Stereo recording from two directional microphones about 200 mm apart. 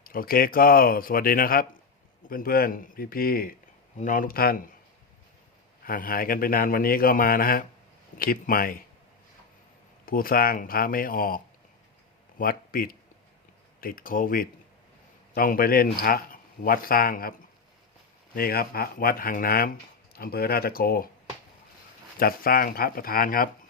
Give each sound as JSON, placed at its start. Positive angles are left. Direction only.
{"t": 0.0, "sound": "speech", "side_deg": 45}
{"t": 5.8, "sound": "speech", "side_deg": 45}
{"t": 10.1, "sound": "speech", "side_deg": 45}
{"t": 12.4, "sound": "a man's voice", "side_deg": 45}
{"t": 18.3, "sound": "speech", "side_deg": 50}
{"t": 22.2, "sound": "speech", "side_deg": 45}